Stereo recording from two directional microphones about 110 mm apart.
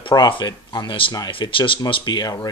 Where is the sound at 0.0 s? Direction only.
45° left (ahead or behind).